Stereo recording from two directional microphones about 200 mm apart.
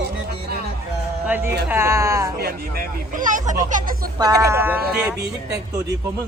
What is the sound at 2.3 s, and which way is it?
Speech, 50° right (ahead or behind).